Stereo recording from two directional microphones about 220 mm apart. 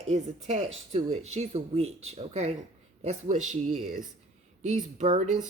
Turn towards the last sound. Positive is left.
turn(degrees=-35)  # may be behind; listen again after turning